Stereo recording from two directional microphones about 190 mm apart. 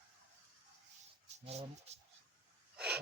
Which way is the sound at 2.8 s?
5° right (ahead or behind).